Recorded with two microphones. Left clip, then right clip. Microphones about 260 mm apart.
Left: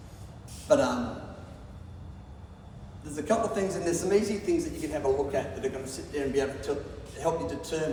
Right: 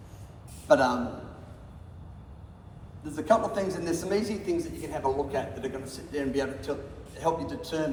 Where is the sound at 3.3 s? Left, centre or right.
Centre.